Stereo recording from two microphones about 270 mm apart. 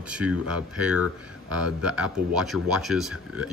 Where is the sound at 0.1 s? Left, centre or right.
Centre.